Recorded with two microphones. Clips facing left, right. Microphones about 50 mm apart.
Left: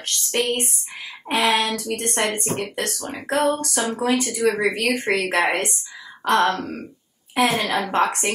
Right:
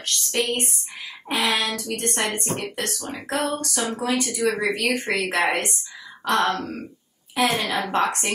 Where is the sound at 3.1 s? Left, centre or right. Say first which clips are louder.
Left 5 dB; left.